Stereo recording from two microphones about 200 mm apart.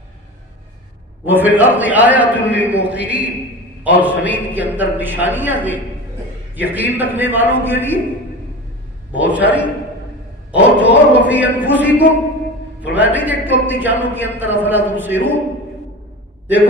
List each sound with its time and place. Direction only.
1.2 s a man's voice: 10° right (ahead or behind)
9.2 s a man's voice: 10° right (ahead or behind)